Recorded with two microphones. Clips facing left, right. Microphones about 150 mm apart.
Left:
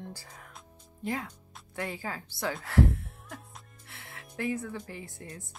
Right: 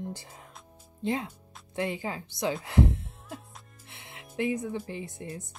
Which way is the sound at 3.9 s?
20° right (ahead or behind).